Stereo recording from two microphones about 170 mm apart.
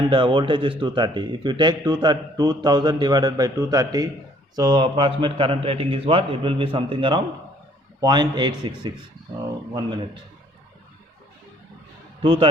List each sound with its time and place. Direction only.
0.0 s a man's voice: 30° right (ahead or behind)
12.2 s a man's voice: 30° right (ahead or behind)